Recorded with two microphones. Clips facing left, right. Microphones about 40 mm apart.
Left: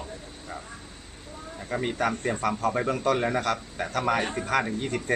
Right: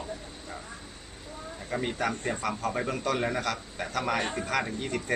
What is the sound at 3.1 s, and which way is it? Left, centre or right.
Speech, left.